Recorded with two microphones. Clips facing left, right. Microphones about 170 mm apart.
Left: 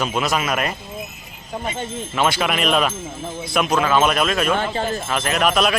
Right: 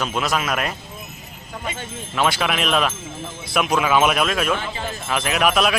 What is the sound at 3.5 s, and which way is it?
Speech, 10° right (ahead or behind).